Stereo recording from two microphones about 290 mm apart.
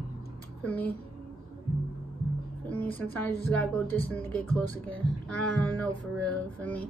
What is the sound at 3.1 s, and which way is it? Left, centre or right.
A woman's voice, centre.